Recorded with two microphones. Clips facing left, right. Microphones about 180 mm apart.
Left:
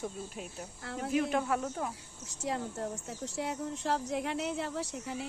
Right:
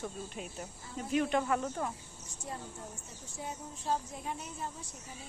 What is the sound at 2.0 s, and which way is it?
Speech, 75° left (ahead or behind).